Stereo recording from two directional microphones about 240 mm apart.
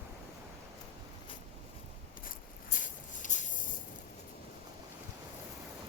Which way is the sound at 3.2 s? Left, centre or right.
Left.